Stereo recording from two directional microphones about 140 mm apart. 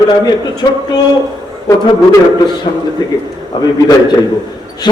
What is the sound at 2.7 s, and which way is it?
Speech, 50° left (ahead or behind).